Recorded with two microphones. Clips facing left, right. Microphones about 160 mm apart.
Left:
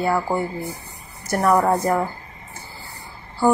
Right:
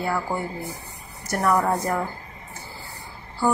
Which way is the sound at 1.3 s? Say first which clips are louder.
Left 4 dB; 35° left (ahead or behind).